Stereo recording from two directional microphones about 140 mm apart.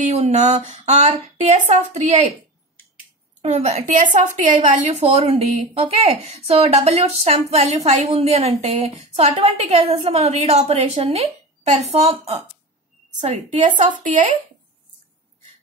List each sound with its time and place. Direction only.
0.1 s a woman's voice: 50° right (ahead or behind)
3.4 s a woman's voice: 50° right (ahead or behind)
5.0 s a woman's voice: 40° right (ahead or behind)